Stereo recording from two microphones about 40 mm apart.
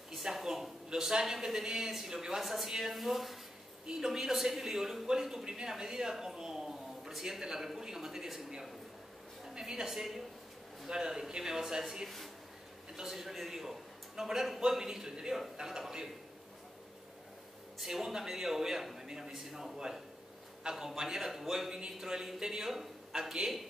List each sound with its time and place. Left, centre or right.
0.1 s a sound: centre
1.0 s speech: centre
3.8 s a man's voice: centre
17.7 s speech: centre